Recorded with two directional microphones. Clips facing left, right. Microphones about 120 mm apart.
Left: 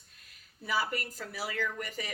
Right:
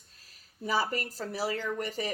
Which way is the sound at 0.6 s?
40° right (ahead or behind).